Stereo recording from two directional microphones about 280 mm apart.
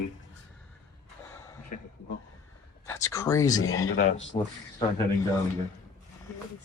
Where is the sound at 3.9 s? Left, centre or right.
Left.